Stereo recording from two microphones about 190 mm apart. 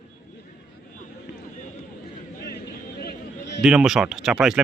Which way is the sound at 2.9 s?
60° left (ahead or behind).